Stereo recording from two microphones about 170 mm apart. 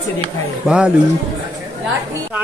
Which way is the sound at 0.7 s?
5° right (ahead or behind).